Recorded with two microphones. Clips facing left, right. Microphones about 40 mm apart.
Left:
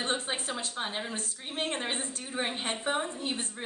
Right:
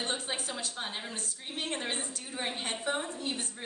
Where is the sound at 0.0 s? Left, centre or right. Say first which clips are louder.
Left 3 dB; left.